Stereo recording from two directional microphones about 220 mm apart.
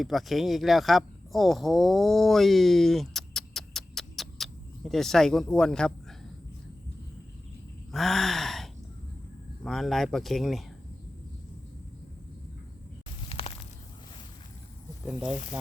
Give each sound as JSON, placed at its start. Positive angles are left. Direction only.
{"t": 0.0, "sound": "speech", "side_deg": 0}
{"t": 7.9, "sound": "gasp", "side_deg": 0}
{"t": 9.6, "sound": "speech", "side_deg": 0}
{"t": 13.2, "sound": "a sound", "side_deg": 25}
{"t": 15.0, "sound": "speech", "side_deg": -5}